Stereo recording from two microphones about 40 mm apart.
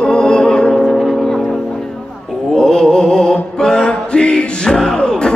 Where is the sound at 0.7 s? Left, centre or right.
Centre.